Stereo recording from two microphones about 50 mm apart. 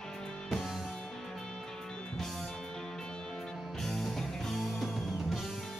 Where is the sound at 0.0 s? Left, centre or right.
Centre.